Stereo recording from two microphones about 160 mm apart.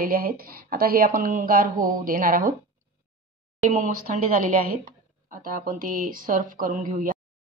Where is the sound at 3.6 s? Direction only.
50° right (ahead or behind).